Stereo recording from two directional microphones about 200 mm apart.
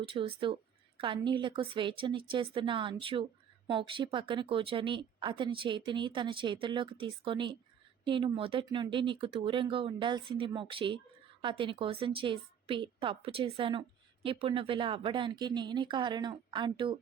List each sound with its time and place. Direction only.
0.0 s a woman's voice: 30° right (ahead or behind)